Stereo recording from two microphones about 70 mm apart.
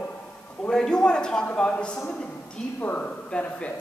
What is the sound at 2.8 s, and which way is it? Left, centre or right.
Speech, left.